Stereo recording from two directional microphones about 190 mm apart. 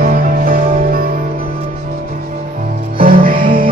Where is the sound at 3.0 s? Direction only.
50° right (ahead or behind).